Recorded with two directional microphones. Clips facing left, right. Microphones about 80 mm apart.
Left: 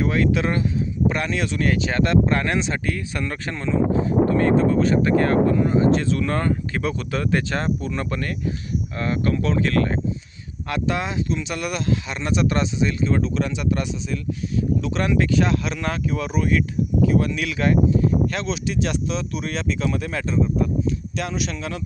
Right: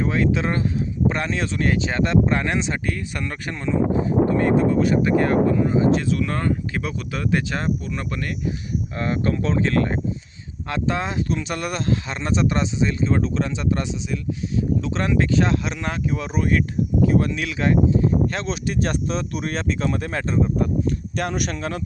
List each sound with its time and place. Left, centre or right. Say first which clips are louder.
0.0 s speech: left 1 dB; right; by 8.3 s centre
9.0 s speech: even; right
11.3 s speech: even; right
16.3 s speech: right 1 dB; right
18.4 s speech: even; right
20.4 s speech: even; right